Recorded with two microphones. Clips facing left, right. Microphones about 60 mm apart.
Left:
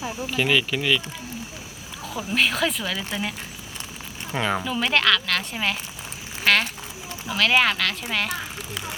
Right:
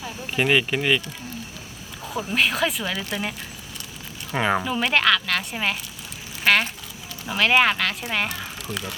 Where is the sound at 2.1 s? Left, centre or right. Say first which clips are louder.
Right 1 dB; centre.